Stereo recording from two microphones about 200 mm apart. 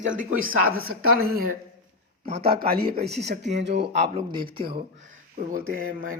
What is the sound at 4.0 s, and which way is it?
Speech, 30° right (ahead or behind).